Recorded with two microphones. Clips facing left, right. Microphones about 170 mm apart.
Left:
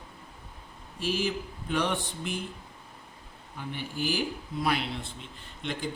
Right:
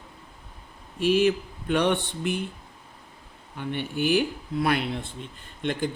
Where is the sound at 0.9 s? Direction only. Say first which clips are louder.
Right 9 dB; 65° right (ahead or behind).